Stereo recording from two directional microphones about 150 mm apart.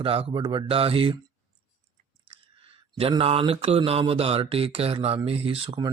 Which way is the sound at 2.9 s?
40° right (ahead or behind).